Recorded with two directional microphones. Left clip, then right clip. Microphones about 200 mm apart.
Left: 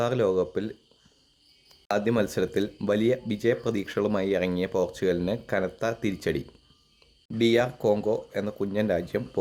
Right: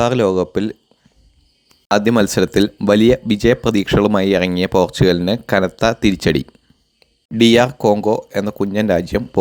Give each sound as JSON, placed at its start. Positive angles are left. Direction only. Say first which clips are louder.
{"t": 0.0, "sound": "speech", "louder": "right 9 dB", "side_deg": -30}
{"t": 1.9, "sound": "speech", "louder": "right 11 dB", "side_deg": -35}